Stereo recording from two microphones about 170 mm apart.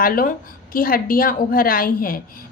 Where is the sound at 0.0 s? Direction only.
55° left (ahead or behind).